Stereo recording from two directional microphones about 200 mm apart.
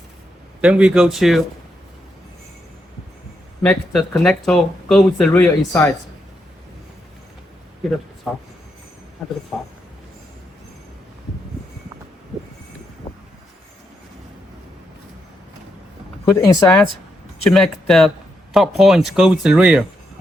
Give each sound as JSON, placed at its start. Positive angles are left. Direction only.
{"t": 0.6, "sound": "speech", "side_deg": -5}
{"t": 3.6, "sound": "speech", "side_deg": 5}
{"t": 9.2, "sound": "speech", "side_deg": 0}
{"t": 16.3, "sound": "speech", "side_deg": 15}
{"t": 17.5, "sound": "speech", "side_deg": 0}